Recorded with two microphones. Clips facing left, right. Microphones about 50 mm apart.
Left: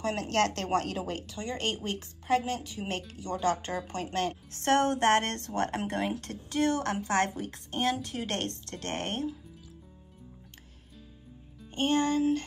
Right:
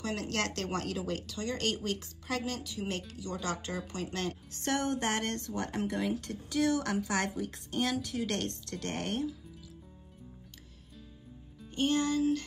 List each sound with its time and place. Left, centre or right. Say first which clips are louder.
0.0 s speech: left 6 dB; left
11.7 s speech: left 2 dB; left